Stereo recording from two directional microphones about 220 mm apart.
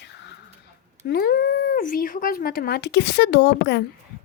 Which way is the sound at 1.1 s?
45° left (ahead or behind).